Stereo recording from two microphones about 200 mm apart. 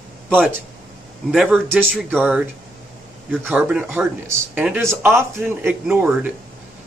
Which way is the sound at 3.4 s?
10° right (ahead or behind).